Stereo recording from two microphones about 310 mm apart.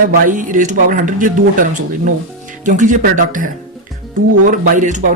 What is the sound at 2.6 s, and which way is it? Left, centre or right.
Speech, right.